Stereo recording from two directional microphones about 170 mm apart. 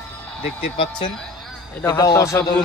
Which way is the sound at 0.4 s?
30° left (ahead or behind).